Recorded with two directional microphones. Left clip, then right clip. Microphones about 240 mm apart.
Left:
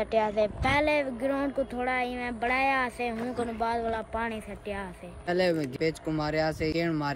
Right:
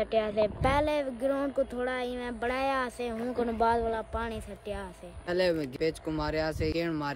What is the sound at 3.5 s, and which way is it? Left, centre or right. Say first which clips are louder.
A woman's voice: right 3 dB; right.